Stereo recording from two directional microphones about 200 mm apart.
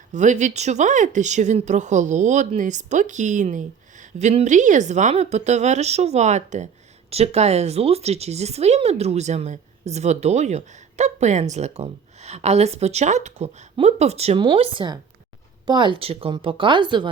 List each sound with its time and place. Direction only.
0.1 s a woman's voice: 35° right (ahead or behind)